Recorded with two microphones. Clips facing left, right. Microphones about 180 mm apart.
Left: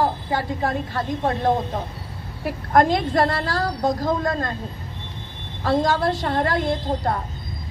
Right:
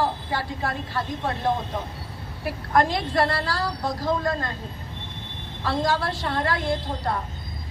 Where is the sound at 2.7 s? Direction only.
50° left (ahead or behind).